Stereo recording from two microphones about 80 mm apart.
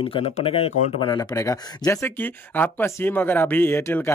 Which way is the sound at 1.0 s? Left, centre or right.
Left.